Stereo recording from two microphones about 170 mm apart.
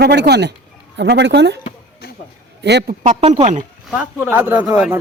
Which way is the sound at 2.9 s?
45° right (ahead or behind).